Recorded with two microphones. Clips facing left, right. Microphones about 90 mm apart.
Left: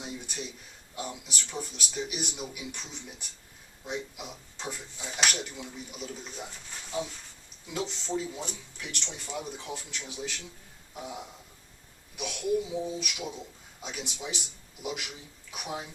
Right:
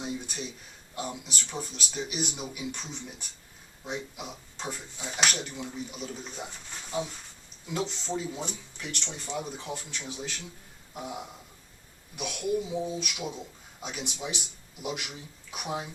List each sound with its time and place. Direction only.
0.9 s a man's voice: centre (ahead or behind)